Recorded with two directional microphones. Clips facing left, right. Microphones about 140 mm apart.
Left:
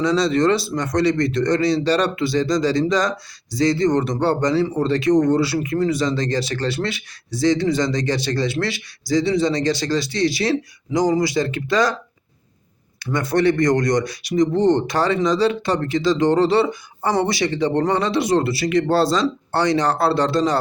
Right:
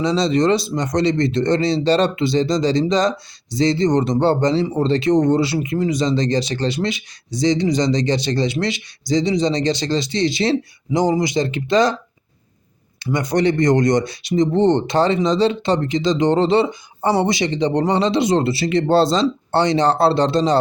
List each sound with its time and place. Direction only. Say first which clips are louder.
0.0 s a man's voice: even; 20° right (ahead or behind)
13.1 s a man's voice: even; 20° right (ahead or behind)